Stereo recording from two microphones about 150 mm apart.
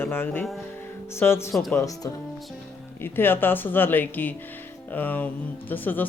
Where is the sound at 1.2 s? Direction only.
15° left (ahead or behind).